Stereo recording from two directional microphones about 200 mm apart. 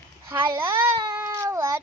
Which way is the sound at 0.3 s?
15° right (ahead or behind).